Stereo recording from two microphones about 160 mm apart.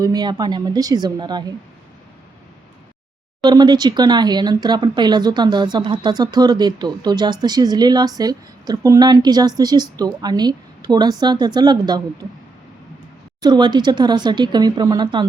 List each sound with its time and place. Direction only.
0.0 s speech: 25° right (ahead or behind)
3.4 s speech: 25° right (ahead or behind)
13.4 s speech: 25° right (ahead or behind)